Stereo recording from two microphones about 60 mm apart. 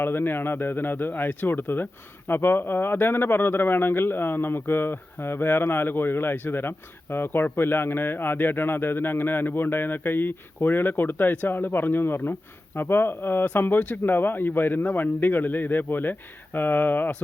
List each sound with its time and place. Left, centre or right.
0.0 s speech: left